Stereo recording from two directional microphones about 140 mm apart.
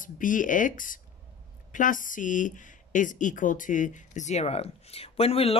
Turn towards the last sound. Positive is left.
turn(degrees=45)  # may be behind; listen again after turning